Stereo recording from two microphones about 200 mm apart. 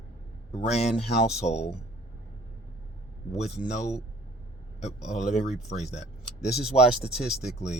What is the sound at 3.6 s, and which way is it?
Speech, 35° left (ahead or behind).